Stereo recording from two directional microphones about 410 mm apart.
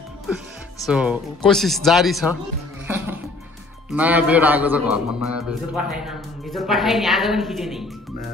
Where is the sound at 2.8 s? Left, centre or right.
Centre.